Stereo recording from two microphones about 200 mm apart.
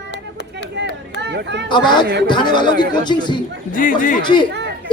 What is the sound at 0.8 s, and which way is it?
Speech, 60° right (ahead or behind).